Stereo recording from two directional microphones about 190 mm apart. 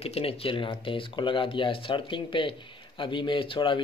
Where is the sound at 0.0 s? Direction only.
30° left (ahead or behind).